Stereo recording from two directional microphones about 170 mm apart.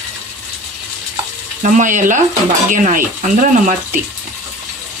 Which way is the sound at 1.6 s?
45° right (ahead or behind).